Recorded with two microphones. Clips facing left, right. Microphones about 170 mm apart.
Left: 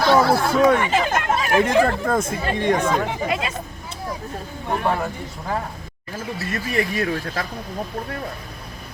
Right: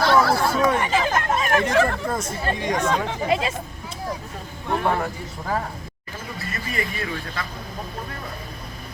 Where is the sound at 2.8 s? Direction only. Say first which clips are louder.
Left 2 dB; 10° left (ahead or behind).